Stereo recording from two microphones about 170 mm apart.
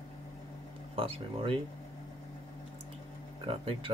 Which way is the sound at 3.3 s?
35° right (ahead or behind).